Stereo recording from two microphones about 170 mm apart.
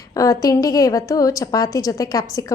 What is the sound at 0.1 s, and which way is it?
A woman's voice, 20° left (ahead or behind).